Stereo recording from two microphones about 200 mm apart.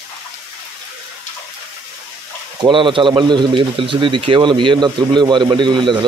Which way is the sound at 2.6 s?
25° right (ahead or behind).